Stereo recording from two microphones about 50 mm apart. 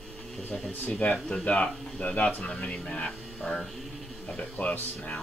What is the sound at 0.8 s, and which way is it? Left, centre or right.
Speech, left.